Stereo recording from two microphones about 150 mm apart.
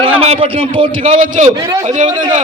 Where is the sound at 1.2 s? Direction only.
55° right (ahead or behind).